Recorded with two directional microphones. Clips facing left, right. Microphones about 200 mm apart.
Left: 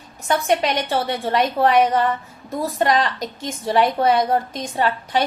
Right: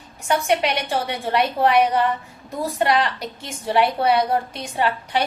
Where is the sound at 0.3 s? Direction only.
15° right (ahead or behind).